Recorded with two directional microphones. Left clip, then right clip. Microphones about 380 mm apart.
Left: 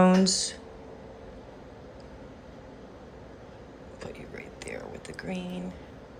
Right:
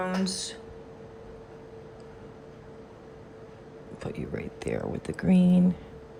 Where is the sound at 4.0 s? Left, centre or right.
Centre.